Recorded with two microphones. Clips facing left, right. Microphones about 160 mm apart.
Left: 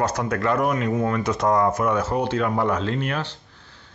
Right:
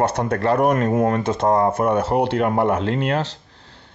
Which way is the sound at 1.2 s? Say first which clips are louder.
Right 2 dB; 25° right (ahead or behind).